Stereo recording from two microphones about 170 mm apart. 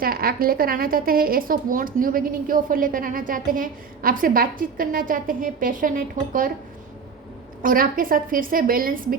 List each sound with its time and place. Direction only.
0.0 s speech: 60° right (ahead or behind)
7.6 s speech: 55° right (ahead or behind)